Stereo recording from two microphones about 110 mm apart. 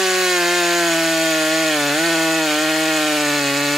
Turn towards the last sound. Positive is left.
turn(degrees=0)  # may be behind; listen again after turning